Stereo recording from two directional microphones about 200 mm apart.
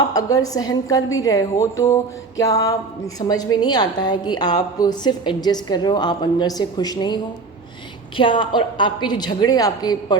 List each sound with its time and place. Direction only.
0.1 s a woman's voice: 15° left (ahead or behind)